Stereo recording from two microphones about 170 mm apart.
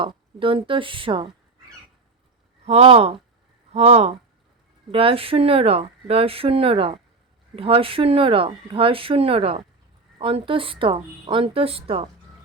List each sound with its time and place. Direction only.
0.0 s speech: 30° right (ahead or behind)
2.6 s speech: 35° right (ahead or behind)